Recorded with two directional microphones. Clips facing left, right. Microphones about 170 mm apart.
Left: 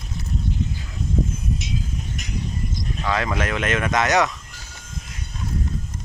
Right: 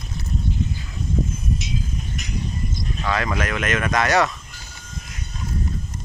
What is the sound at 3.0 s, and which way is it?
Speech, 25° left (ahead or behind).